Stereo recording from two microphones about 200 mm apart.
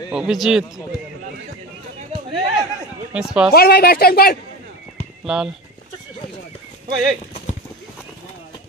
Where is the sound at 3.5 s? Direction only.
50° left (ahead or behind).